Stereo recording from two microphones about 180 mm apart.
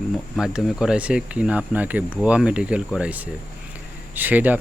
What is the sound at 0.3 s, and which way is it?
Speech, 5° right (ahead or behind).